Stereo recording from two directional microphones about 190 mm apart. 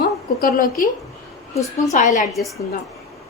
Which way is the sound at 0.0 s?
50° left (ahead or behind).